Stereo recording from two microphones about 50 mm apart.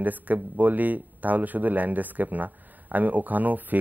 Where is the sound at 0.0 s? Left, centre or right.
Right.